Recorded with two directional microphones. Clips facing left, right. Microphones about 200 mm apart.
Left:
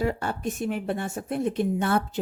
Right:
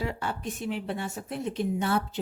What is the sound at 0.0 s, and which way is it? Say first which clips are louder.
A woman's voice: left 5 dB; 45° left (ahead or behind).